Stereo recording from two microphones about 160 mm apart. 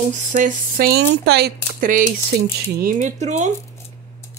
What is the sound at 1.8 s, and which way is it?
Speech, 55° right (ahead or behind).